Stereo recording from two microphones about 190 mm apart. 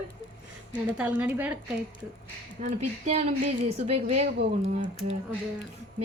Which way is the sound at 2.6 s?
35° right (ahead or behind).